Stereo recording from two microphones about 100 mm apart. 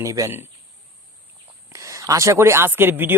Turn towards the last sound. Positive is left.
turn(degrees=-20)  # may be behind; listen again after turning